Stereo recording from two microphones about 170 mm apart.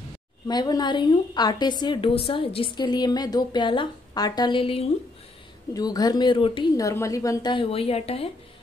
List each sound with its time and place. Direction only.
0.5 s a woman's voice: 25° left (ahead or behind)
6.8 s a woman's voice: 20° left (ahead or behind); by 8.3 s 35° left (ahead or behind)